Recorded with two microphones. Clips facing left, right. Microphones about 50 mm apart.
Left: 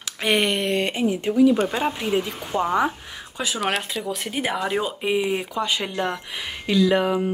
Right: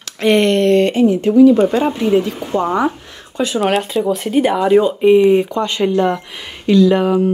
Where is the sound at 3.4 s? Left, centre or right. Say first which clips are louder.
Right 9 dB; centre.